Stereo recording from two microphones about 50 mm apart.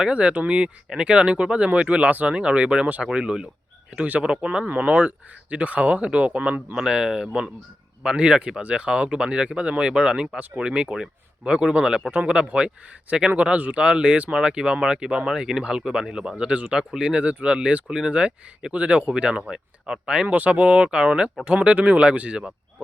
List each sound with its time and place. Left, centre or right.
0.0 s speech: right
3.9 s speech: right
6.7 s speech: centre
20.2 s speech: right